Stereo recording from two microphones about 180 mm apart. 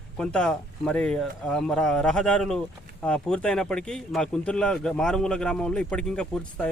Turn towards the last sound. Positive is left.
turn(degrees=5)  # may be behind; listen again after turning